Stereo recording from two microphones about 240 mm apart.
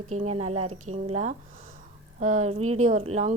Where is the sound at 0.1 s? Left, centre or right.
Right.